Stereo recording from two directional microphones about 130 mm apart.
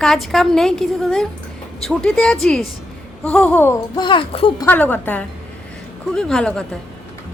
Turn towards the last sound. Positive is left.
turn(degrees=5)  # may be behind; listen again after turning